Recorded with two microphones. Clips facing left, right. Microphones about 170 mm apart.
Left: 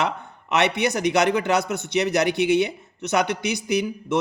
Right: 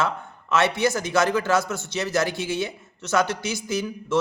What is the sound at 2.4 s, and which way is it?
Speech, 65° left (ahead or behind).